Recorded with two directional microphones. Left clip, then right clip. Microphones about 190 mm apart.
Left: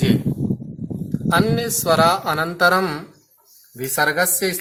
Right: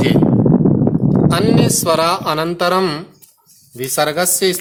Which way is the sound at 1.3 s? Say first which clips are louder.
Right 1 dB; 50° right (ahead or behind).